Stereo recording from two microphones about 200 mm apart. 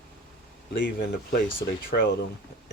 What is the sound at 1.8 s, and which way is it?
Speech, 60° left (ahead or behind).